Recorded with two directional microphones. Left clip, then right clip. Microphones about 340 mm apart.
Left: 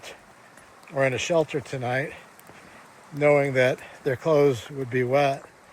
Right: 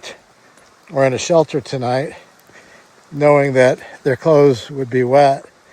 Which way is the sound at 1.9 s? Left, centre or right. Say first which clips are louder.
Right 8 dB; right.